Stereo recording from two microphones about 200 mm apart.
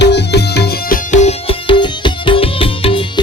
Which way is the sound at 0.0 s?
55° left (ahead or behind).